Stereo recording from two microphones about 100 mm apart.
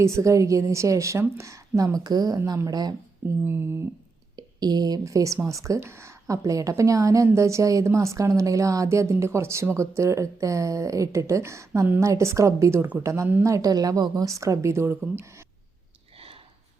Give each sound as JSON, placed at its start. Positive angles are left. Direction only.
{"t": 0.0, "sound": "a woman's voice", "side_deg": -30}
{"t": 3.4, "sound": "speech", "side_deg": -25}
{"t": 4.4, "sound": "a woman's voice", "side_deg": -40}